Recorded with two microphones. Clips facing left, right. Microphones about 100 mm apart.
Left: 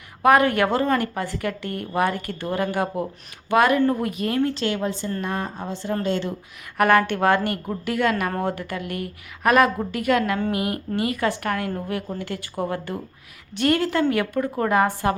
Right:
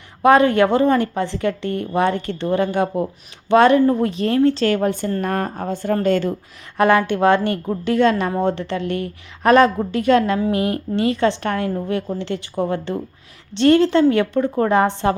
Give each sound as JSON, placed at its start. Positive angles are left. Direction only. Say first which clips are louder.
{"t": 0.2, "sound": "a woman's voice", "louder": "right 4 dB", "side_deg": -25}
{"t": 4.6, "sound": "speech", "louder": "right 6 dB", "side_deg": -50}
{"t": 6.7, "sound": "a woman's voice", "louder": "right 3 dB", "side_deg": -20}